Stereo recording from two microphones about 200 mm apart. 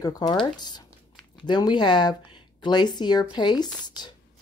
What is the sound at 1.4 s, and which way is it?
Speech, 20° left (ahead or behind).